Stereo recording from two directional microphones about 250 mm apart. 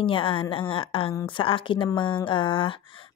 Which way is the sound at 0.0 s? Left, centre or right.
Left.